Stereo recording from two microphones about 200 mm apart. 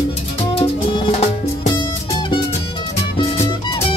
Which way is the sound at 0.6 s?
30° left (ahead or behind).